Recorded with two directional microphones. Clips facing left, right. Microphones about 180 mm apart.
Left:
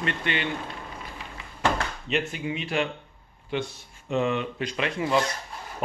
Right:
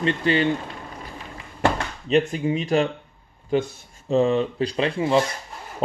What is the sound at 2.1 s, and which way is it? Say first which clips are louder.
Speech: right 9 dB; 35° right (ahead or behind).